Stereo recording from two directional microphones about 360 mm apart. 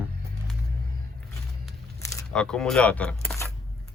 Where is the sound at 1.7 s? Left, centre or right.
Centre.